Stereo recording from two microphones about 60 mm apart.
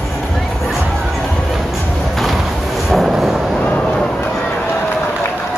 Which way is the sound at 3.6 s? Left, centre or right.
Centre.